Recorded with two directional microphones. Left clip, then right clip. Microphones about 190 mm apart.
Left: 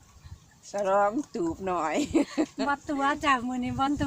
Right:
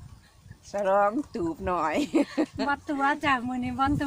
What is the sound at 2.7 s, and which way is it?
Speech, 15° left (ahead or behind).